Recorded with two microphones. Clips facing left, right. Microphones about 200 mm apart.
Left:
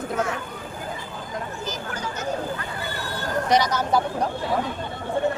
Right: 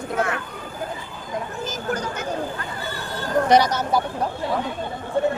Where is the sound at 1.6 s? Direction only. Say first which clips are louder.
Right 4 dB; 50° right (ahead or behind).